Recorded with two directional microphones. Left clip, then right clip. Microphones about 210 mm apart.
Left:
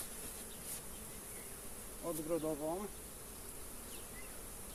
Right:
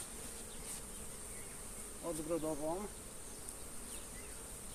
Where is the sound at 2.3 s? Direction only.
Centre (ahead or behind).